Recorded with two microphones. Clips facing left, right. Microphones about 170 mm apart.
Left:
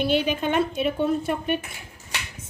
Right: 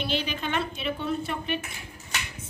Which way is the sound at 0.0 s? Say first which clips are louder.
Left 7 dB; 50° left (ahead or behind).